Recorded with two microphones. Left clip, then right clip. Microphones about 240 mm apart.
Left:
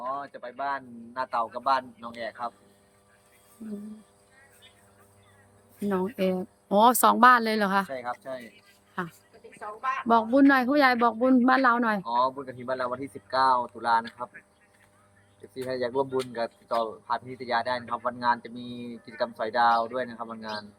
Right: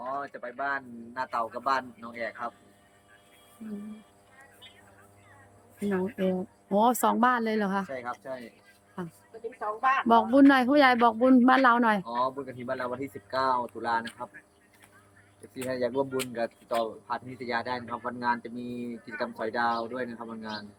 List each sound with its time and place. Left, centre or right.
0.0 s speech: centre
6.1 s speech: centre
7.9 s speech: centre
9.8 s speech: right
10.1 s speech: centre
12.0 s speech: centre
15.5 s speech: centre